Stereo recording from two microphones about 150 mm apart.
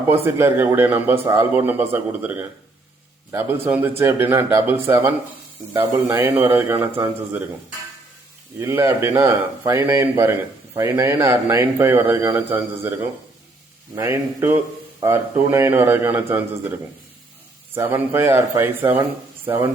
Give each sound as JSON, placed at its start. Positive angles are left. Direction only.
{"t": 0.1, "sound": "speech", "side_deg": -15}
{"t": 8.5, "sound": "speech", "side_deg": -15}
{"t": 17.7, "sound": "speech", "side_deg": -15}